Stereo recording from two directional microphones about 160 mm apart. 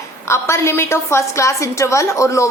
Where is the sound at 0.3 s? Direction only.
15° left (ahead or behind).